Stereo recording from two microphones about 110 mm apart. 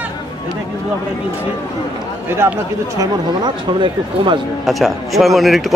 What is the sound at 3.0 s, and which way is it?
Speech, 45° right (ahead or behind).